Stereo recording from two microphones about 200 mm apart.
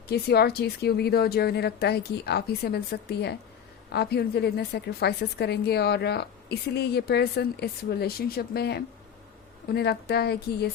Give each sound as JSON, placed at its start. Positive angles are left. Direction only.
{"t": 0.1, "sound": "a woman's voice", "side_deg": 55}